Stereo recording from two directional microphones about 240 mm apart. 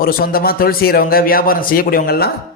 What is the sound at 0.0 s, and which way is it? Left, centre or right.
Speech, left.